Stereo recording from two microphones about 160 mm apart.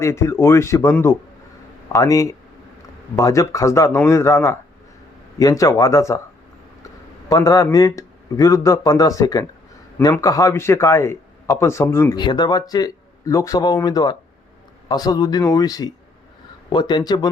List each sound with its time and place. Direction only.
0.0 s a man's voice: 15° left (ahead or behind)
7.3 s a man's voice: 20° left (ahead or behind)
12.1 s speech: 30° left (ahead or behind)